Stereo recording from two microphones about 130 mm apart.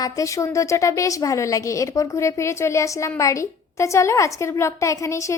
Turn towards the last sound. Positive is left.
turn(degrees=25)  # may be behind; listen again after turning